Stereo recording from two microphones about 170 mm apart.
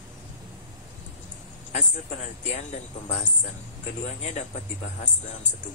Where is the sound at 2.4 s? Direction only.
40° left (ahead or behind).